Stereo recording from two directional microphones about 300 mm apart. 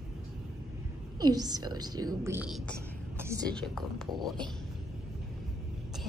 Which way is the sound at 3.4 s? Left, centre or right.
Centre.